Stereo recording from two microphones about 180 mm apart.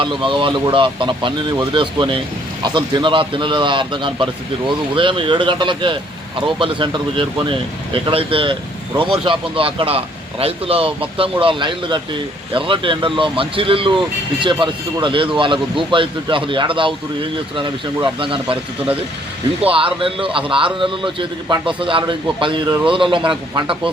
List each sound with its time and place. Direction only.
0.0 s speech: 30° right (ahead or behind)
19.6 s speech: 30° right (ahead or behind)